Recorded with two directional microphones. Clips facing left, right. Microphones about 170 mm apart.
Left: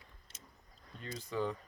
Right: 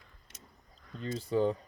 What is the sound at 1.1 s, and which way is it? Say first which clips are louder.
Speech: right 8 dB; 30° right (ahead or behind).